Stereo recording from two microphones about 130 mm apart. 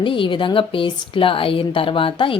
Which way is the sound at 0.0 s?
40° left (ahead or behind).